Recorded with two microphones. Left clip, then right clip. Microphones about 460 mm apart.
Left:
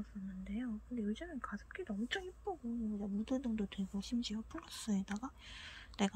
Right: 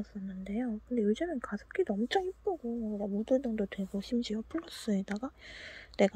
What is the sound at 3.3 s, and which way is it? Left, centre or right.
Speech, centre.